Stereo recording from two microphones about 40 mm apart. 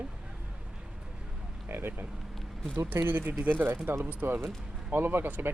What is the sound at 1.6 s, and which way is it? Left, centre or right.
Speech, right.